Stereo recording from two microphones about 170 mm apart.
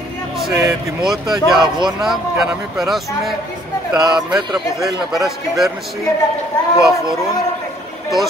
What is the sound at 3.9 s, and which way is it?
Speech, 25° right (ahead or behind).